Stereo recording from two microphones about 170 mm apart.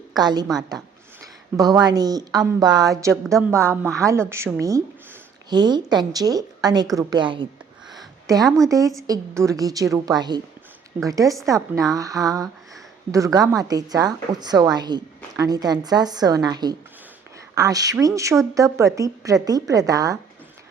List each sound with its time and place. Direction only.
0.1 s a woman's voice: 25° right (ahead or behind)
1.8 s a woman's voice: 25° right (ahead or behind)
5.5 s a woman's voice: 25° right (ahead or behind)
8.4 s speech: centre (ahead or behind)
9.0 s a woman's voice: 20° right (ahead or behind)